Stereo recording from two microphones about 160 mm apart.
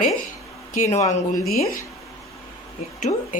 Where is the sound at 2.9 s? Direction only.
50° left (ahead or behind).